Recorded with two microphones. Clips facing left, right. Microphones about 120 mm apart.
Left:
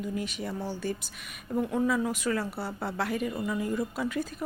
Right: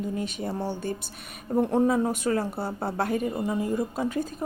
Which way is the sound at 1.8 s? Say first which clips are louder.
Right 4 dB; 35° right (ahead or behind).